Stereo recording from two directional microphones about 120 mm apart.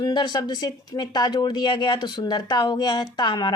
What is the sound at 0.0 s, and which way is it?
Speech, 40° left (ahead or behind).